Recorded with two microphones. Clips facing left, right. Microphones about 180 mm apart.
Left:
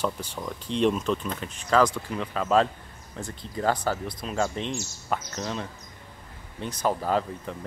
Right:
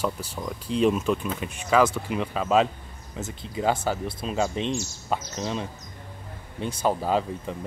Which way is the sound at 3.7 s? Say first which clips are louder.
Right 1 dB; 25° right (ahead or behind).